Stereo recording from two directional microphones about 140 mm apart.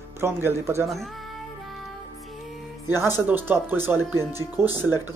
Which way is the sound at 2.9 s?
15° right (ahead or behind).